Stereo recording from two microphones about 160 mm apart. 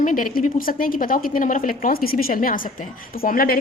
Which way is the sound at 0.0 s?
55° left (ahead or behind).